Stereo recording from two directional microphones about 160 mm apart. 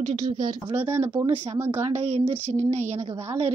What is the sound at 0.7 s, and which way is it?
Speech, 15° right (ahead or behind).